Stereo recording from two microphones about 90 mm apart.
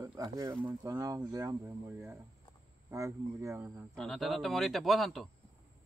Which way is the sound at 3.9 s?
5° left (ahead or behind).